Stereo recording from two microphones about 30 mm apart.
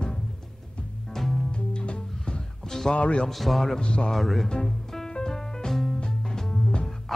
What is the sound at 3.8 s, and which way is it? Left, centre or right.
Speech, left.